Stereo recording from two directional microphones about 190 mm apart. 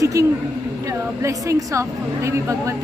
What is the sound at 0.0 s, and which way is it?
A woman's voice, 15° right (ahead or behind).